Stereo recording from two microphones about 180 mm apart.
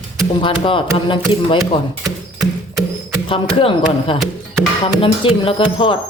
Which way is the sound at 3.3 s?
30° left (ahead or behind).